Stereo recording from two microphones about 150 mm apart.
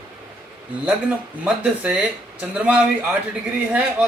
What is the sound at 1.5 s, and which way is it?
Speech, 10° right (ahead or behind).